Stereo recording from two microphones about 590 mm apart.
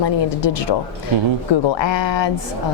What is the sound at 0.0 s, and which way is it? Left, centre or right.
Speech, left.